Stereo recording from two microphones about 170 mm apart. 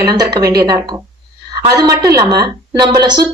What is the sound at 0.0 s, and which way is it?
A woman's voice, 20° right (ahead or behind).